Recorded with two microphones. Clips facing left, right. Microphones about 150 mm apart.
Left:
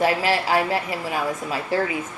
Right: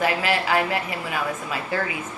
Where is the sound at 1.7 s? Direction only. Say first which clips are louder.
Left 4 dB; 35° left (ahead or behind).